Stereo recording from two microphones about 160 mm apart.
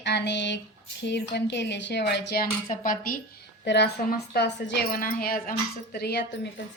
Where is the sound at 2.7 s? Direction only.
60° left (ahead or behind).